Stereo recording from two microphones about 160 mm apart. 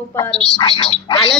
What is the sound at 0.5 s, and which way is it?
Speech, 30° left (ahead or behind).